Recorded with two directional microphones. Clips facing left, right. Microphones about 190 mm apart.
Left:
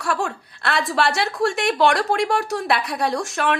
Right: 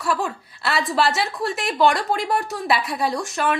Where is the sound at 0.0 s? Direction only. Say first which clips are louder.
Even; centre (ahead or behind).